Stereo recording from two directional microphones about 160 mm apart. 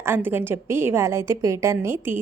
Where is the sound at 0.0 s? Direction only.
15° right (ahead or behind).